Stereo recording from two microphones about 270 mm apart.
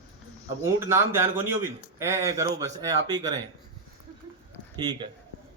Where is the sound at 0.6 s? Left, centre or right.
Centre.